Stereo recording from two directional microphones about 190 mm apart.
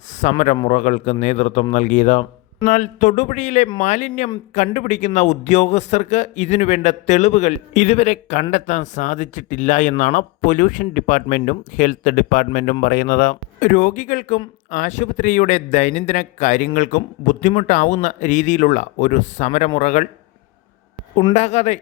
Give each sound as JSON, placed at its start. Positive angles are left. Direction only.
{"t": 0.2, "sound": "a man's voice", "side_deg": 40}
{"t": 21.3, "sound": "a man's voice", "side_deg": 35}